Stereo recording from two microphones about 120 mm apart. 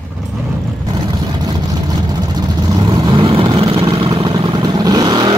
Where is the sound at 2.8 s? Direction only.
35° right (ahead or behind).